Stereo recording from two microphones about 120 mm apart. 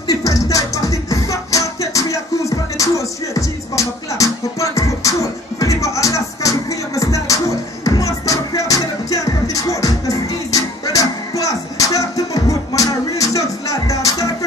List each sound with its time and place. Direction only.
0.1 s music: 30° left (ahead or behind)